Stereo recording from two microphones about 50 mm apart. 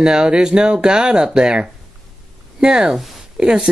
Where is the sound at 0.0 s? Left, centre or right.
Centre.